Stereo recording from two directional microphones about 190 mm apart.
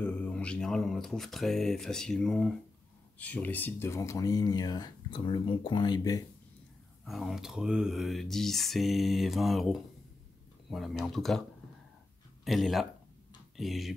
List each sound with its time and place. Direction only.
0.0 s speech: 5° left (ahead or behind)
7.1 s speech: centre (ahead or behind)
12.4 s speech: centre (ahead or behind)